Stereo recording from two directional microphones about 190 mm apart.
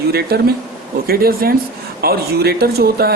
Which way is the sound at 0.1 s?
55° right (ahead or behind).